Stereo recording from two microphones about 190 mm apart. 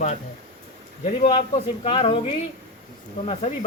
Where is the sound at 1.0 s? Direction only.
30° left (ahead or behind).